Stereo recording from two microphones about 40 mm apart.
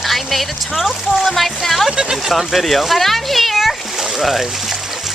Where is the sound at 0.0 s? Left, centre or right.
Centre.